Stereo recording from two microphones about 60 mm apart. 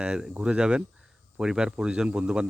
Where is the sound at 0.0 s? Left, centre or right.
Centre.